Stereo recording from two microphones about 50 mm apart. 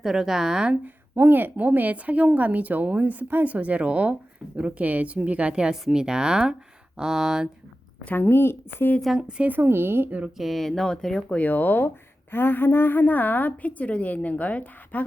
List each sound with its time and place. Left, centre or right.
0.0 s a woman's voice: centre
1.1 s a woman's voice: right; by 7.4 s centre
8.1 s a woman's voice: left
9.5 s speech: right
10.3 s speech: centre
11.3 s a woman's voice: left